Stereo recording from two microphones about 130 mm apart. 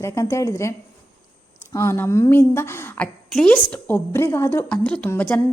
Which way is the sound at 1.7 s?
20° left (ahead or behind).